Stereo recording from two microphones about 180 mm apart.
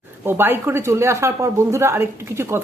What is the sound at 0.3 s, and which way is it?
A woman's voice, 10° right (ahead or behind).